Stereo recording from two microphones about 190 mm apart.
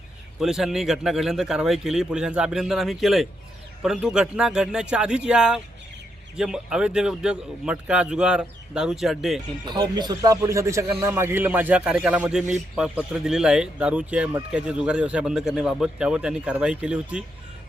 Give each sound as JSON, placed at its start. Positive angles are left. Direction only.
{"t": 0.3, "sound": "a man's voice", "side_deg": 0}
{"t": 9.6, "sound": "a man's voice", "side_deg": -20}